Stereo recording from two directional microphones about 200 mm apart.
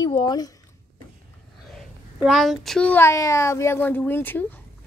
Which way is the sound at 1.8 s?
Centre (ahead or behind).